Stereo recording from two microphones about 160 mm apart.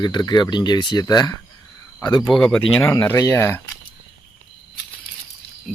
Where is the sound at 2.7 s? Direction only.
15° left (ahead or behind).